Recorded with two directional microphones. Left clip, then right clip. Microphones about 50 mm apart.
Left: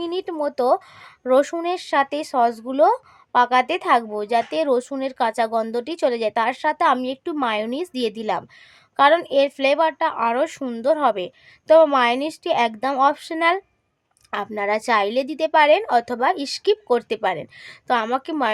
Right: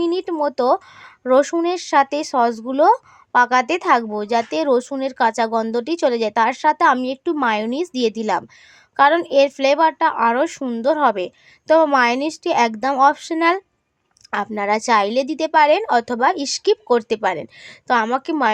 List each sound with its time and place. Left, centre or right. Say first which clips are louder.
0.0 s a sound: right 6 dB; right
0.3 s speech: even; right
17.7 s a woman's voice: right 3 dB; right